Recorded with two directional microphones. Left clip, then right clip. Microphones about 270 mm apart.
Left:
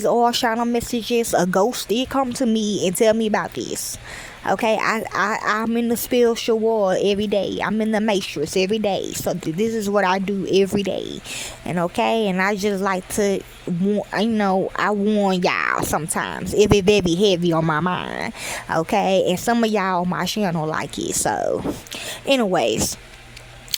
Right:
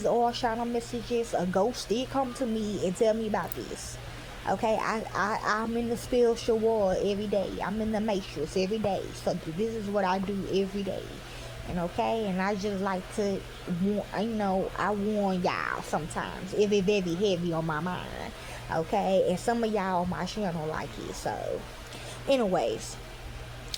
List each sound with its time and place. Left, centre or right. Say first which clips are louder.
0.0 s speech: left 8 dB; left